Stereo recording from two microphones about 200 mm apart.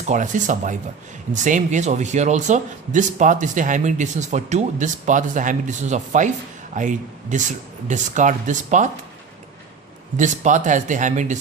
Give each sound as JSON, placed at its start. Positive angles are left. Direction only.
{"t": 0.1, "sound": "speech", "side_deg": -40}
{"t": 10.2, "sound": "speech", "side_deg": -35}